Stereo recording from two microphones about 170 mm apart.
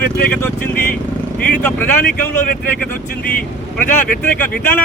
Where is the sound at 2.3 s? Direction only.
50° left (ahead or behind).